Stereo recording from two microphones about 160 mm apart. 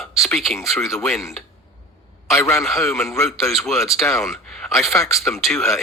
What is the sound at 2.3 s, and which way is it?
Speech, 15° left (ahead or behind).